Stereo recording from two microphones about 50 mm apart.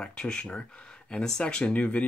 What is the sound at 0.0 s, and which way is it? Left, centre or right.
Speech, centre.